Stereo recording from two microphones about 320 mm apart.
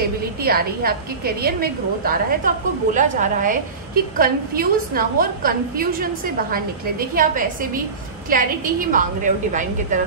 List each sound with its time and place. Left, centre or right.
0.4 s a woman's voice: right